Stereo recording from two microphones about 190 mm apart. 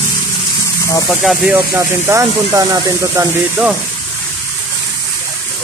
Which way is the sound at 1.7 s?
15° right (ahead or behind).